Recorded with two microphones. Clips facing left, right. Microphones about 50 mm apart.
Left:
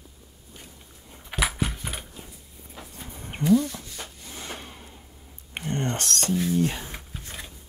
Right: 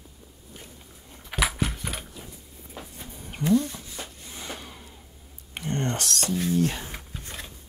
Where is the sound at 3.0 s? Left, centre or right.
Left.